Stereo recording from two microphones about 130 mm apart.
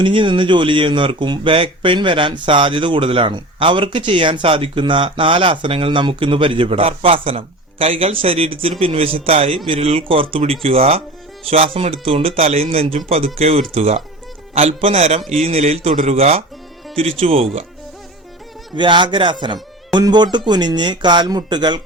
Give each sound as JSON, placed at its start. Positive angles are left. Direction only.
{"t": 0.0, "sound": "speech", "side_deg": -40}
{"t": 18.8, "sound": "speech", "side_deg": -40}